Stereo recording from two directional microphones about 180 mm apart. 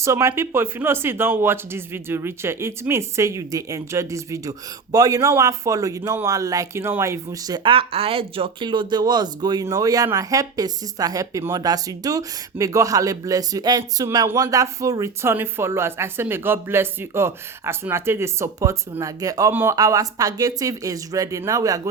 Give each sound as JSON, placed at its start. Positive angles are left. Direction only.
{"t": 0.0, "sound": "speech", "side_deg": -15}